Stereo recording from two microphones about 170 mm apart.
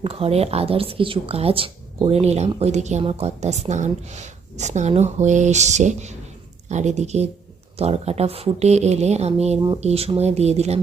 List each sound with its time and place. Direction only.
0.0 s speech: 35° right (ahead or behind)